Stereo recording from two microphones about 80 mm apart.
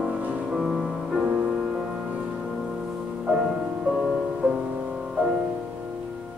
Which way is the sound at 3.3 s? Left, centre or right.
Centre.